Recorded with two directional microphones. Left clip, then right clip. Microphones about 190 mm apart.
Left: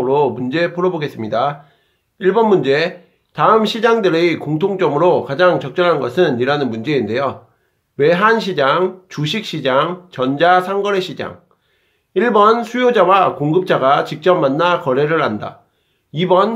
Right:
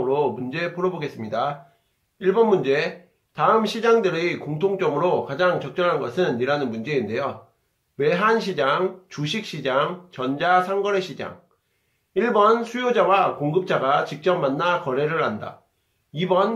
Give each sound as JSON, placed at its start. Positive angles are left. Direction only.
{"t": 0.0, "sound": "speech", "side_deg": 45}